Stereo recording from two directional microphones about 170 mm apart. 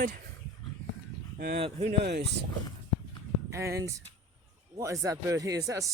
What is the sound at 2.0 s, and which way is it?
Speech, 80° right.